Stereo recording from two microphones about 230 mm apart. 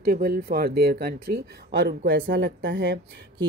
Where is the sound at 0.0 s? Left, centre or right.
Right.